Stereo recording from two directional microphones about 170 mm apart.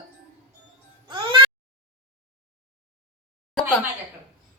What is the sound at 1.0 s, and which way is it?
Music, 30° right (ahead or behind).